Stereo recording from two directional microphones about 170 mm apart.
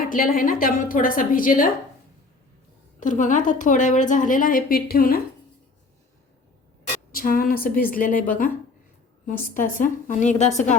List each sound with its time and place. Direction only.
0.0 s a woman's voice: 55° left (ahead or behind)
3.0 s a woman's voice: 50° left (ahead or behind)
7.1 s a woman's voice: 55° left (ahead or behind)
9.2 s a woman's voice: 55° left (ahead or behind)